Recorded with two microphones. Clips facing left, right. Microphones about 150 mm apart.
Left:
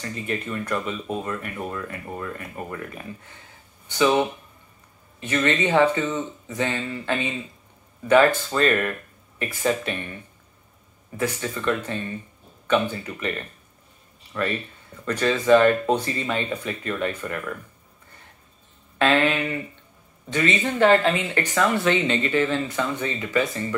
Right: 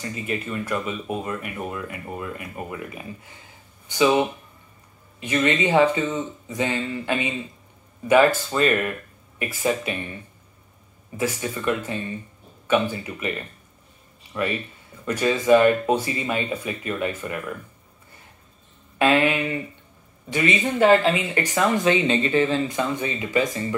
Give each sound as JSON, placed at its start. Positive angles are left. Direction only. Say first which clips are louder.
{"t": 0.0, "sound": "speech", "louder": "even", "side_deg": -10}
{"t": 11.1, "sound": "speech", "louder": "right 1 dB", "side_deg": -10}
{"t": 18.9, "sound": "speech", "louder": "right 1 dB", "side_deg": -15}